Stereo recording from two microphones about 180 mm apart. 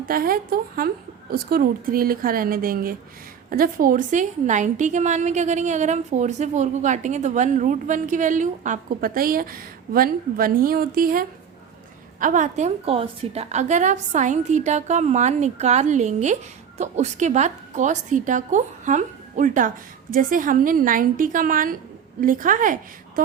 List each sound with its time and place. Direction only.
0.0 s a woman's voice: 55° right (ahead or behind)